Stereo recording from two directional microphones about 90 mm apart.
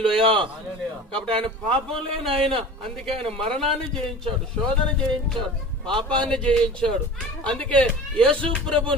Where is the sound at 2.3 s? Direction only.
90° right.